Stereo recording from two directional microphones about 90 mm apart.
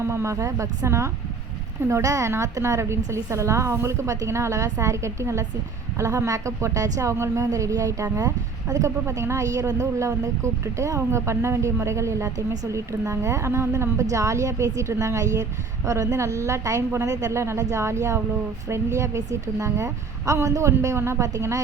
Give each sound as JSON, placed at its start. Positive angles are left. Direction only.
{"t": 0.0, "sound": "a woman's voice", "side_deg": -30}